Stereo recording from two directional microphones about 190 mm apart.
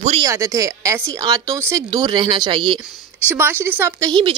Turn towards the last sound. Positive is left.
turn(degrees=-10)  # may be behind; listen again after turning